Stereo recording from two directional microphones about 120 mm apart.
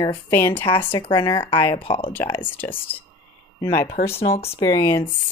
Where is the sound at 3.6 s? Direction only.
30° left (ahead or behind).